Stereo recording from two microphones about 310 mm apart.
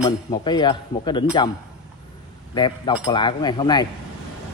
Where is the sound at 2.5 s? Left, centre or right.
Centre.